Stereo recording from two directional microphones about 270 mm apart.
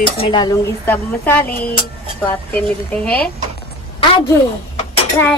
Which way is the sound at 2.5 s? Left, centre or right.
Centre.